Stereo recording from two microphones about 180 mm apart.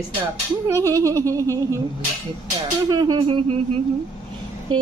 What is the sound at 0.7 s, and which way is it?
Speech, 15° right (ahead or behind).